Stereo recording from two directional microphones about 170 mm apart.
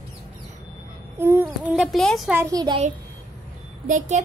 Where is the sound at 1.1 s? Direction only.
15° right (ahead or behind).